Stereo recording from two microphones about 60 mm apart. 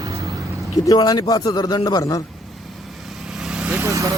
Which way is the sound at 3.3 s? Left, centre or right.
Centre.